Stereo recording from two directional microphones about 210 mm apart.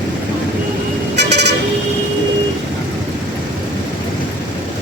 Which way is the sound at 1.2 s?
55° right (ahead or behind).